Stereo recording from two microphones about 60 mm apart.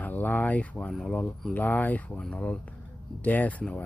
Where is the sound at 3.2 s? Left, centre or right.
Left.